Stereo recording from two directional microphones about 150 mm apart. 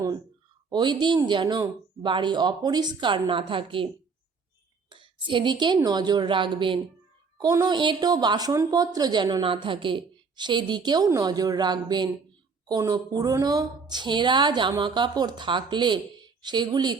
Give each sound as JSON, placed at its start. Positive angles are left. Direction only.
{"t": 0.7, "sound": "speech", "side_deg": -30}
{"t": 4.9, "sound": "speech", "side_deg": -35}